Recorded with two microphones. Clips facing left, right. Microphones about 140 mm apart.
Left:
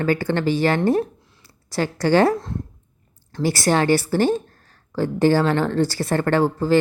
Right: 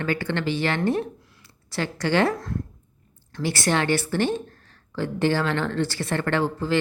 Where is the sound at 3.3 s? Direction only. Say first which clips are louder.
Left 5 dB; 40° left (ahead or behind).